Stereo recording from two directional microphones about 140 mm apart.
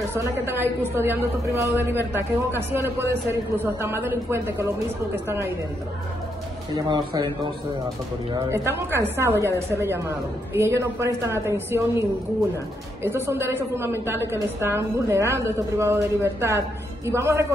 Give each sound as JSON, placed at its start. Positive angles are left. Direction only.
{"t": 0.1, "sound": "a man's voice", "side_deg": -15}
{"t": 6.7, "sound": "speech", "side_deg": -30}
{"t": 8.5, "sound": "a woman's voice", "side_deg": -20}
{"t": 13.0, "sound": "a woman's voice", "side_deg": -15}